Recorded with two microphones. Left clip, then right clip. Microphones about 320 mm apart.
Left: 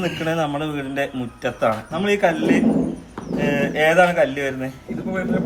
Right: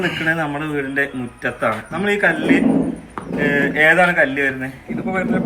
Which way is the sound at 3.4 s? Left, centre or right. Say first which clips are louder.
Right 4 dB; centre.